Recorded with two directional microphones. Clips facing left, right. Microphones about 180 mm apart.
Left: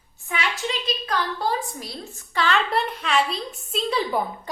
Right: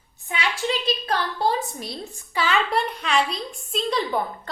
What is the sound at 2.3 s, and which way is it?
A woman's voice, 5° right (ahead or behind).